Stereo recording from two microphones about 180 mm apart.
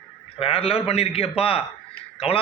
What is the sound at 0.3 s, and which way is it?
A man's voice, 30° left (ahead or behind).